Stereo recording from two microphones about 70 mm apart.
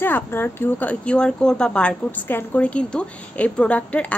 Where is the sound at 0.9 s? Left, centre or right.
Centre.